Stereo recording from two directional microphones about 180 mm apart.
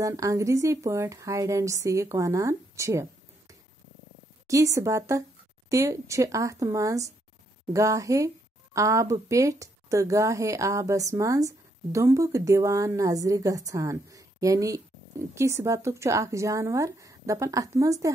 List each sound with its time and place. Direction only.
0.0 s a woman's voice: 20° right (ahead or behind)
4.5 s a woman's voice: 15° right (ahead or behind)